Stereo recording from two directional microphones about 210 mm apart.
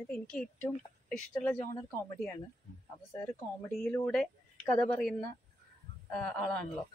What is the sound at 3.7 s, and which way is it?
Speech, centre (ahead or behind).